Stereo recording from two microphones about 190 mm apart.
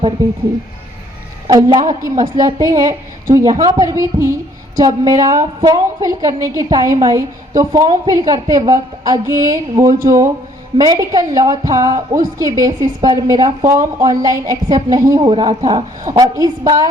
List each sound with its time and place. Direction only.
1.5 s a woman's voice: 20° right (ahead or behind)